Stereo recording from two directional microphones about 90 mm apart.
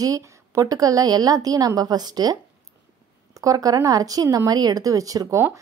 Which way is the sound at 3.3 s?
40° right (ahead or behind).